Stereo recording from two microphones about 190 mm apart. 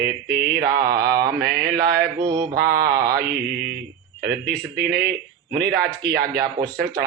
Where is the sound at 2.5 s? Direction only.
55° right (ahead or behind).